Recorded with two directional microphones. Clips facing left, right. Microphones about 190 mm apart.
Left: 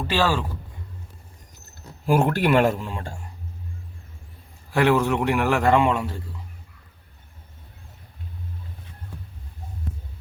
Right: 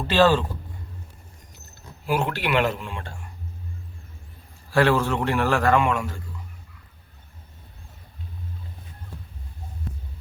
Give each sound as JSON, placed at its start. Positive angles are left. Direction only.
{"t": 0.1, "sound": "a man's voice", "side_deg": 10}
{"t": 2.0, "sound": "speech", "side_deg": 50}
{"t": 4.7, "sound": "a man's voice", "side_deg": 15}